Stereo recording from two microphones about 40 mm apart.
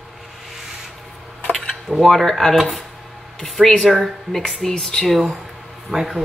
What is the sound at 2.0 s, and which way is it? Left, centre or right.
Speech, centre.